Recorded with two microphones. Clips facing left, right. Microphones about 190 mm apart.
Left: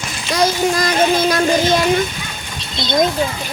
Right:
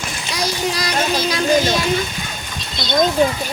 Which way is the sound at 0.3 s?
50° left (ahead or behind).